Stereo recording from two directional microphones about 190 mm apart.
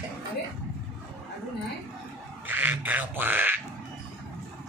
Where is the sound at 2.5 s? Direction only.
10° right (ahead or behind).